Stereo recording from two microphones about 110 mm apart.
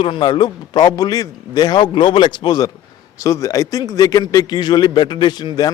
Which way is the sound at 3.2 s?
30° left (ahead or behind).